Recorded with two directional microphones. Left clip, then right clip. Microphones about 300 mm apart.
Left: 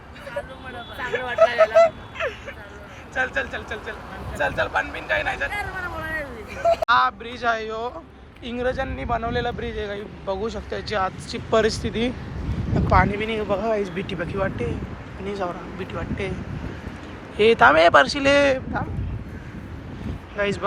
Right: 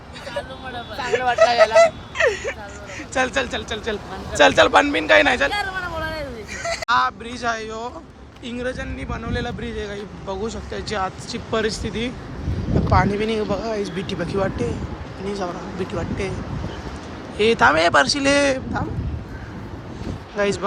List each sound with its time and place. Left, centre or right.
1.4 s speech: centre
4.4 s speech: centre
6.5 s speech: centre
17.3 s speech: centre
20.3 s speech: centre